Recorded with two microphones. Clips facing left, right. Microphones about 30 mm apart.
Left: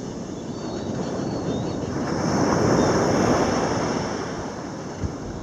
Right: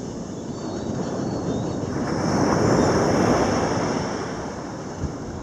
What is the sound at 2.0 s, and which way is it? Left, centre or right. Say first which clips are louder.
Vehicle: right 1 dB; centre.